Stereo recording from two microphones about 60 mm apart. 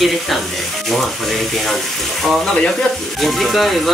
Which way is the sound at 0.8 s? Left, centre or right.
Centre.